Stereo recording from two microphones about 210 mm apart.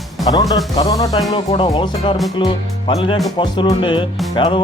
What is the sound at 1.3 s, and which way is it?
Speech, 25° left (ahead or behind).